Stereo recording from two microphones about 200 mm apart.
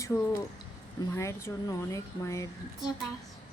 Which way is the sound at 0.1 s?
10° left (ahead or behind).